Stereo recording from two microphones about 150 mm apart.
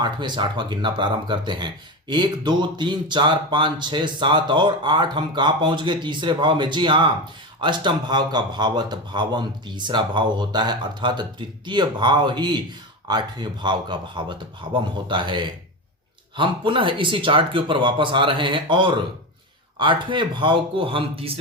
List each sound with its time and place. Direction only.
0.0 s speech: 30° right (ahead or behind)